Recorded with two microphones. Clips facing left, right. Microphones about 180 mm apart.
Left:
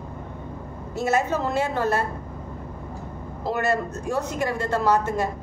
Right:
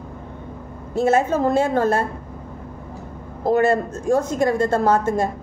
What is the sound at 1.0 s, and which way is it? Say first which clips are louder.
A woman's voice: right 5 dB; 50° right (ahead or behind).